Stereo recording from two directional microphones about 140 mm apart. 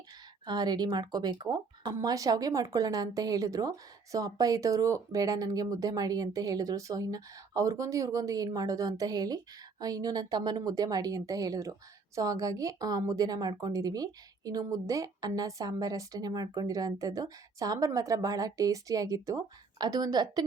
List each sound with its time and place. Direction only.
0.4 s speech: 30° right (ahead or behind)